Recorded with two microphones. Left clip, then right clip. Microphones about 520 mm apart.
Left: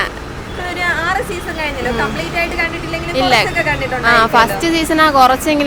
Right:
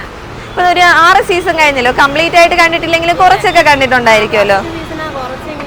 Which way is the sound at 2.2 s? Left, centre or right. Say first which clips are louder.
Right 11 dB; right.